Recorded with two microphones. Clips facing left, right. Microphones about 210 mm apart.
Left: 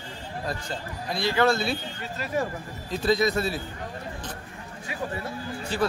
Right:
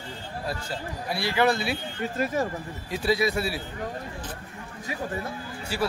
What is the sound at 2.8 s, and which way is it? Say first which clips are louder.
Speech: left 2 dB; 10° right (ahead or behind).